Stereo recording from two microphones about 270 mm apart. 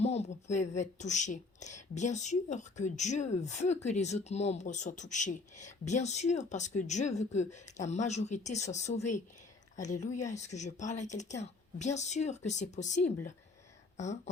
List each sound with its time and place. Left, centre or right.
0.0 s speech: left